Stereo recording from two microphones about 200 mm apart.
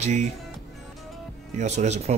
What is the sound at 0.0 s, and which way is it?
Speech, 35° right (ahead or behind).